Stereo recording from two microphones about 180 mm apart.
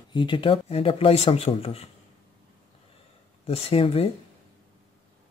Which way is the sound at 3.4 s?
35° left (ahead or behind).